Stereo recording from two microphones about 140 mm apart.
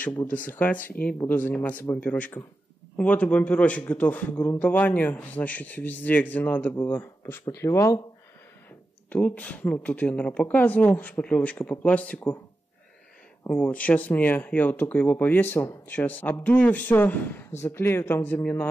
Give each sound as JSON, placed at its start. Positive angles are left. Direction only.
{"t": 0.0, "sound": "speech", "side_deg": 15}
{"t": 9.1, "sound": "speech", "side_deg": 10}
{"t": 13.4, "sound": "speech", "side_deg": 10}